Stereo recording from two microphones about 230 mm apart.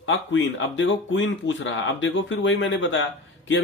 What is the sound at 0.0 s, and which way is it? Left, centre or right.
Speech, left.